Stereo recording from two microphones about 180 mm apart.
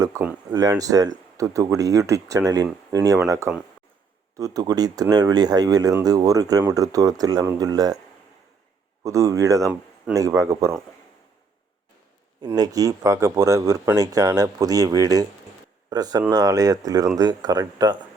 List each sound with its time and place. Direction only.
0.0 s speech: 20° right (ahead or behind)
9.0 s speech: 15° right (ahead or behind)
12.4 s speech: 20° right (ahead or behind)